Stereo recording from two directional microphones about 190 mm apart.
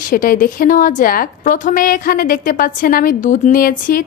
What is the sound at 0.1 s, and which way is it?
A woman's voice, 45° left (ahead or behind).